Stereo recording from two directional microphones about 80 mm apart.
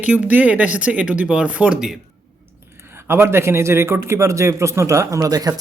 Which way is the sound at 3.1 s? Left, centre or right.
Right.